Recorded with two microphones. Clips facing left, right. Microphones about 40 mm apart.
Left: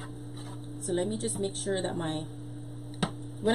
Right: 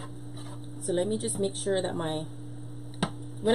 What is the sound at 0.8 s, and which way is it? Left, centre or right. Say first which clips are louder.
A woman's voice: right 2 dB; centre.